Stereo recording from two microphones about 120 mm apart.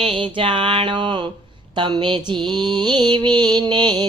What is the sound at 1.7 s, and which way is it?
Mantra, 40° right (ahead or behind).